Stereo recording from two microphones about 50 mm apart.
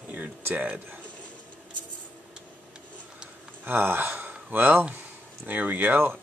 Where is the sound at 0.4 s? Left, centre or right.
Right.